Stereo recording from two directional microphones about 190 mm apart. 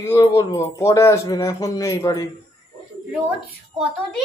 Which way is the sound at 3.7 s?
20° right (ahead or behind).